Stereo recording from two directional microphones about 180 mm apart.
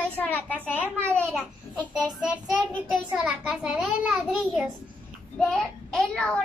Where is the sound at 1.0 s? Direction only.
10° right (ahead or behind).